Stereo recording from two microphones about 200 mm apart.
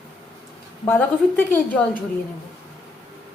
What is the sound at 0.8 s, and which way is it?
Speech, 10° left (ahead or behind).